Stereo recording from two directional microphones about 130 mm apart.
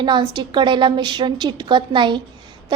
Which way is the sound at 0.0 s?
35° right (ahead or behind).